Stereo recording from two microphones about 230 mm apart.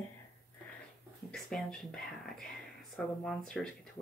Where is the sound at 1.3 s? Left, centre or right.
Centre.